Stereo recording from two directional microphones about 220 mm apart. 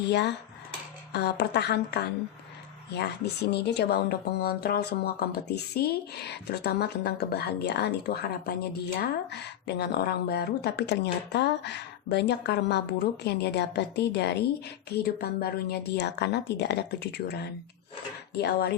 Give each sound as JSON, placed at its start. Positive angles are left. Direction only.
{"t": 0.1, "sound": "speech", "side_deg": 50}